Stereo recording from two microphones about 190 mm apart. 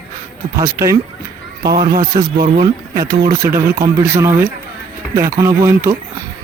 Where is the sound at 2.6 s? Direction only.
20° right (ahead or behind).